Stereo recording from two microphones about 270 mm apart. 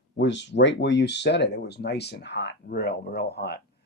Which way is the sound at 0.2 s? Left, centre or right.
Left.